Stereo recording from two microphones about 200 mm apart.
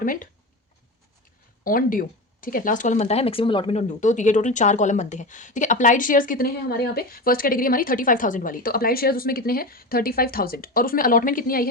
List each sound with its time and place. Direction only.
0.0 s speech: 45° left (ahead or behind)
1.6 s speech: 45° left (ahead or behind)